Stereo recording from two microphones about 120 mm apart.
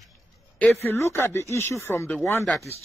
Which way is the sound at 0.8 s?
20° left (ahead or behind).